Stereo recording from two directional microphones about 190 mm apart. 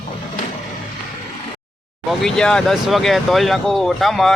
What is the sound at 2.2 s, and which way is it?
Speech, 5° left (ahead or behind).